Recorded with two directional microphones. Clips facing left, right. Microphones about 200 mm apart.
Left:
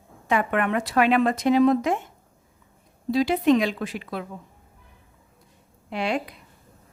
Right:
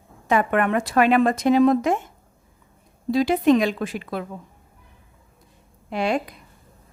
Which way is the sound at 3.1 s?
50° right (ahead or behind).